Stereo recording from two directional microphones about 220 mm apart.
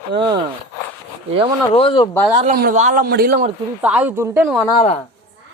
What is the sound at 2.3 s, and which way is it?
A man's voice, 30° right (ahead or behind).